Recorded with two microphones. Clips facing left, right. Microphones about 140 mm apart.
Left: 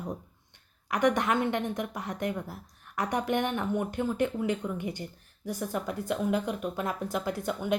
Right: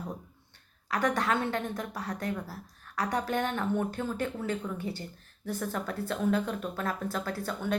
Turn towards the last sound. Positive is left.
turn(degrees=15)  # may be behind; listen again after turning